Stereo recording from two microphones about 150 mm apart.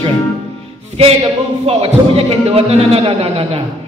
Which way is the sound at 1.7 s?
40° right (ahead or behind).